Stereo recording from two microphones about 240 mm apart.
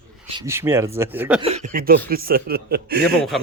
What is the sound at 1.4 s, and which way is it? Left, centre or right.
Speech, right.